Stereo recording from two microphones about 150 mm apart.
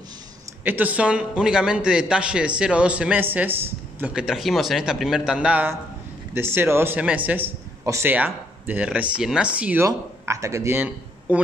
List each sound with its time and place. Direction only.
0.7 s a man's voice: 10° right (ahead or behind)
9.8 s speech: 20° right (ahead or behind)